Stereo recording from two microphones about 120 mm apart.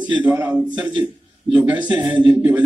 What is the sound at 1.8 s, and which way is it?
Speech, 40° right (ahead or behind).